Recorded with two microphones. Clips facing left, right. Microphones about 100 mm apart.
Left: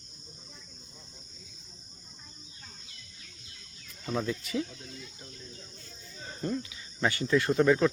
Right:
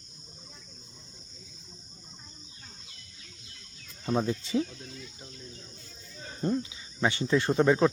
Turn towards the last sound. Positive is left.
turn(degrees=-25)  # may be behind; listen again after turning